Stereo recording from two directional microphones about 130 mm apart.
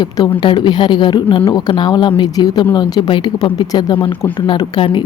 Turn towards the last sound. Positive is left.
turn(degrees=40)  # may be behind; listen again after turning